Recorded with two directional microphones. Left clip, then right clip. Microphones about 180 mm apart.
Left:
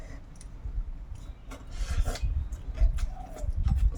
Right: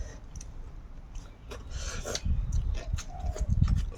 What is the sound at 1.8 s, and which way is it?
Filing, 20° right (ahead or behind).